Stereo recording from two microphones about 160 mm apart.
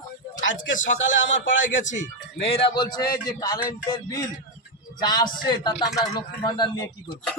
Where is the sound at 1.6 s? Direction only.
50° left (ahead or behind).